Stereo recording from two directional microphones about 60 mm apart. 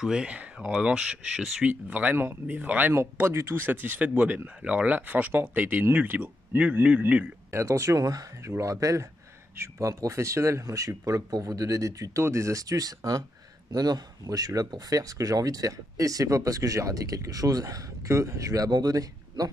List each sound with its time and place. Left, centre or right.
0.0 s speech: centre
1.7 s speech: right
3.3 s speech: right
3.5 s speech: right
7.5 s speech: right
8.4 s speech: right
12.2 s speech: right